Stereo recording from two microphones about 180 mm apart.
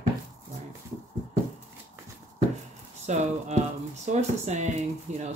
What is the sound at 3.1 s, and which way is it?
Speech, 40° right (ahead or behind).